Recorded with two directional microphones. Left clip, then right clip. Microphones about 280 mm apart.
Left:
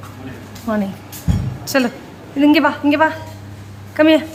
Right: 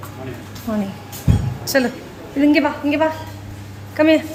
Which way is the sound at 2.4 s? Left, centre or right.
Centre.